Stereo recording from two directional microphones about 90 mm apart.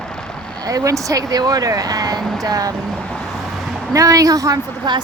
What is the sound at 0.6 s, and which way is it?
Speech, 40° right (ahead or behind).